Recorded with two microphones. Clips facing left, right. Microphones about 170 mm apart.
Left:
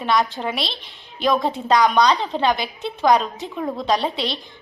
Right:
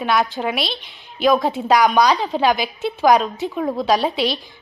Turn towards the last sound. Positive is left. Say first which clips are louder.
# right 5 dB
turn(degrees=25)  # may be behind; listen again after turning